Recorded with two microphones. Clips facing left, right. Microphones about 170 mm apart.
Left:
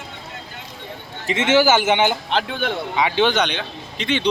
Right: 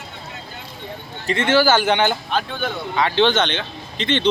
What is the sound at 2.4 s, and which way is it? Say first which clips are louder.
Speech: left 2 dB; 70° left (ahead or behind).